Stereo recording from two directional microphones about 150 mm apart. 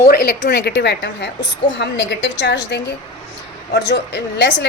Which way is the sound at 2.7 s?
90° left.